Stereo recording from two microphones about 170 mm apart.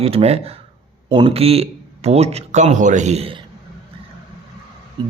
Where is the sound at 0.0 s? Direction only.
35° right (ahead or behind).